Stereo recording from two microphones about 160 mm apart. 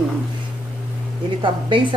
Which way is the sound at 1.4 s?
30° right (ahead or behind).